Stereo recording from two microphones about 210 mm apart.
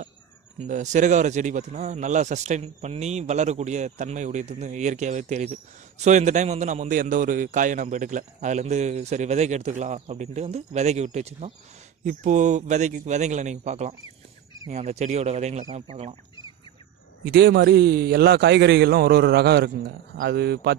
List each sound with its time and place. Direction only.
0.6 s a man's voice: 35° right (ahead or behind)
17.2 s a man's voice: 50° right (ahead or behind)